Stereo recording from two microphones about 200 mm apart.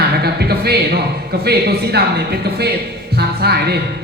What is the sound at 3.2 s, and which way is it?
Music, 55° right (ahead or behind).